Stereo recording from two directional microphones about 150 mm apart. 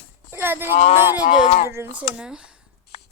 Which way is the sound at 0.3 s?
15° right (ahead or behind).